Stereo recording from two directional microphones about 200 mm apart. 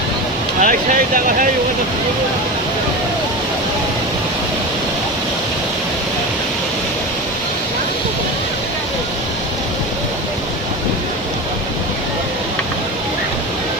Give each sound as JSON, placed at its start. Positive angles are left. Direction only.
{"t": 0.6, "sound": "speech", "side_deg": -40}